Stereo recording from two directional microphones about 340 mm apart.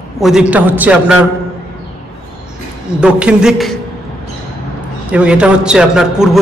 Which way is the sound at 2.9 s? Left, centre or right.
Centre.